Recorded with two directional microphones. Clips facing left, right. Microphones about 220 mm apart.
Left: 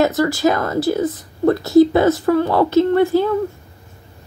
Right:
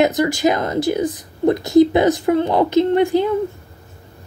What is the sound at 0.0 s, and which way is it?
Speech, 15° right (ahead or behind).